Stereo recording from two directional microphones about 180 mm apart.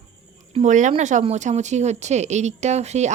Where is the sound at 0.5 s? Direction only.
40° right (ahead or behind).